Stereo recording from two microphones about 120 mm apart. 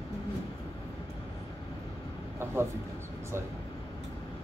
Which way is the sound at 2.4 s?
20° right (ahead or behind).